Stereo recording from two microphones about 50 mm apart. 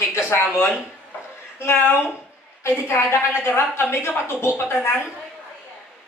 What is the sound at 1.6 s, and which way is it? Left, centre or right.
A woman's voice, left.